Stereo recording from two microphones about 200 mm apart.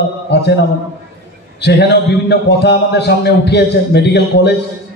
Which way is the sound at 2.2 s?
55° left (ahead or behind).